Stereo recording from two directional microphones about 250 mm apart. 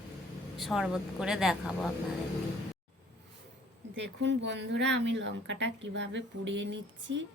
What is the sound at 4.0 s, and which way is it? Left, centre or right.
Speech, right.